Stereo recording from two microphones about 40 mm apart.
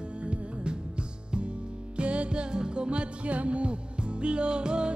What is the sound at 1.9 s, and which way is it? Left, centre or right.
Music, right.